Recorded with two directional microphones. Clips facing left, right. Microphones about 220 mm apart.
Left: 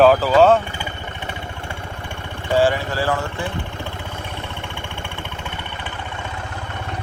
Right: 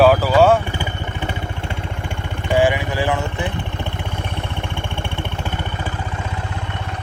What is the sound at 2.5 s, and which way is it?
Speech, 15° right (ahead or behind).